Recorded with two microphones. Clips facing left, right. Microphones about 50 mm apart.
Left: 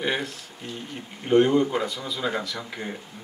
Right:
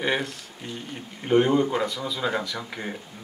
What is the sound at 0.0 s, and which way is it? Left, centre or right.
Speech, centre.